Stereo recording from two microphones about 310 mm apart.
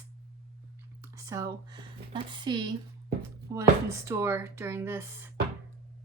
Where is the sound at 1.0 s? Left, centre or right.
Centre.